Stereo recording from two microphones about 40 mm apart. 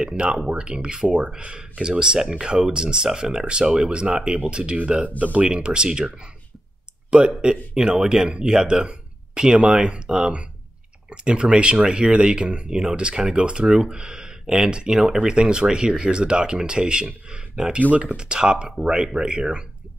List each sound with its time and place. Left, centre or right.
0.0 s speech: right
5.2 s speech: right
5.5 s speech: right
7.7 s speech: centre